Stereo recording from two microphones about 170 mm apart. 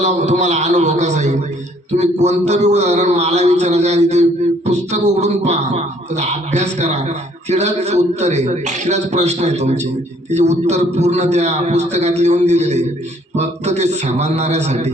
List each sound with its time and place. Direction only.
0.0 s a man's voice: 45° right (ahead or behind)